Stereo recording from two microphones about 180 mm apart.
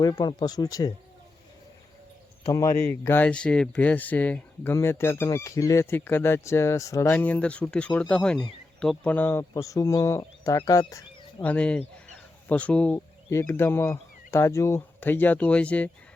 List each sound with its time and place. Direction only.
0.0 s speech: 25° left (ahead or behind)
2.4 s speech: 20° left (ahead or behind)
11.5 s speech: 5° left (ahead or behind)